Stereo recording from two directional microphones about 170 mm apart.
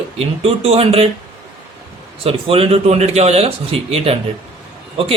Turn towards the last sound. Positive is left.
turn(degrees=-35)  # may be behind; listen again after turning